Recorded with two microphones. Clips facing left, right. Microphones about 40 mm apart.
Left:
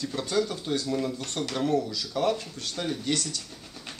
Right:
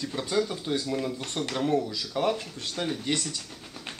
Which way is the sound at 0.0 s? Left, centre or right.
Centre.